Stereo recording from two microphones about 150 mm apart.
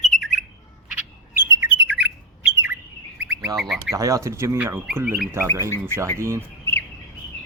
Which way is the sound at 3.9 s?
20° right (ahead or behind).